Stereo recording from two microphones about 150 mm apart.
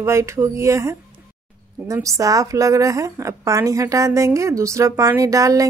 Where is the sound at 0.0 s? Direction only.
20° right (ahead or behind).